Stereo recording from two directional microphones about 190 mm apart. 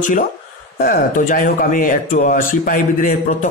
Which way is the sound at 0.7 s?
45° left (ahead or behind).